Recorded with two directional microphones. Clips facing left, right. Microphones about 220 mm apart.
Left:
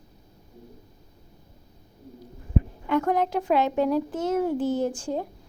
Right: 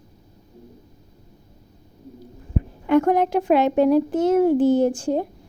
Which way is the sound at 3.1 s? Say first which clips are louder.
Right 5 dB; 60° right (ahead or behind).